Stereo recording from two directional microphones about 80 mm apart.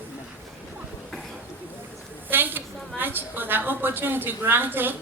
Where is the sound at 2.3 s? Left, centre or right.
Right.